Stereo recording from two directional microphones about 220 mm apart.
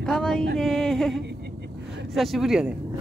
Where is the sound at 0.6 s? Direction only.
Centre (ahead or behind).